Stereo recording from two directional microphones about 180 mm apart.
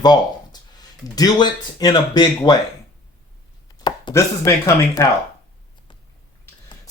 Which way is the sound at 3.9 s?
20° left (ahead or behind).